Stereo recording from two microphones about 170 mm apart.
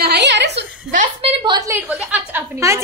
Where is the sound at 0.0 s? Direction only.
80° right.